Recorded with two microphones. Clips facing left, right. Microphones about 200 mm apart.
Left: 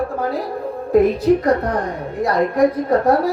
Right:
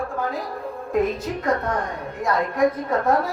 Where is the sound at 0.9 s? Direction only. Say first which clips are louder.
Left 9 dB; 35° left (ahead or behind).